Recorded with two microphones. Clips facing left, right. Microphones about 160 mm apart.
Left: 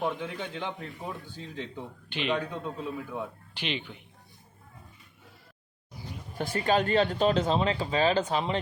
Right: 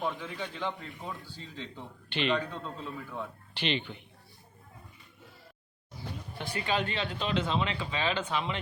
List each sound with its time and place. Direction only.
0.0 s a man's voice: 20° left (ahead or behind)
6.3 s speech: 45° left (ahead or behind)